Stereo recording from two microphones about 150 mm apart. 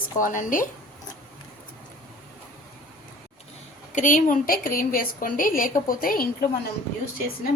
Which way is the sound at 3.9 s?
55° left (ahead or behind).